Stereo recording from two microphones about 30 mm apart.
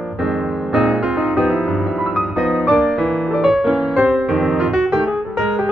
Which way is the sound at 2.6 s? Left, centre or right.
Right.